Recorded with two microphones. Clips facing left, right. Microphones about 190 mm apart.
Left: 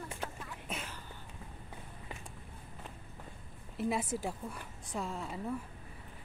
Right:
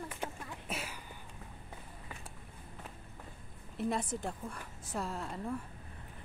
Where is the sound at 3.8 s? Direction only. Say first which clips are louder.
Left 1 dB; 5° left (ahead or behind).